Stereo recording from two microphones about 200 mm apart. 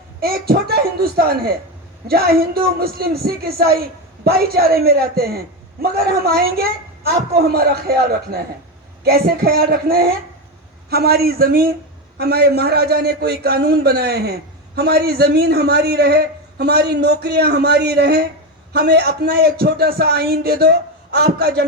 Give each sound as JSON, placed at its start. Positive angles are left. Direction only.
{"t": 0.2, "sound": "a man's voice", "side_deg": -50}